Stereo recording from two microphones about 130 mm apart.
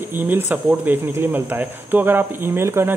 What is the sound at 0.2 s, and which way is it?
Speech, 15° right (ahead or behind).